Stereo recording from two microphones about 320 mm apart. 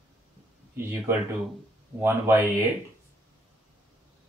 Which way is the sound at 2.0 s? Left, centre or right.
Centre.